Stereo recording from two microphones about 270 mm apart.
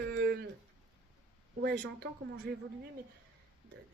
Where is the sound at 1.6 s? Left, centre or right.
Right.